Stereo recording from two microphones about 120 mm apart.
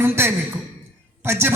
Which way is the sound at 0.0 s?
20° right (ahead or behind).